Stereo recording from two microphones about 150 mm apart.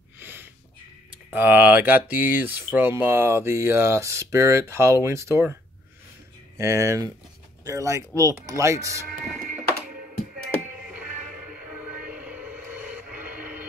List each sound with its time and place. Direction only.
0.2 s a sound: 15° right (ahead or behind)
1.3 s speech: 10° right (ahead or behind)
6.6 s speech: 20° right (ahead or behind)
11.5 s music: 10° right (ahead or behind)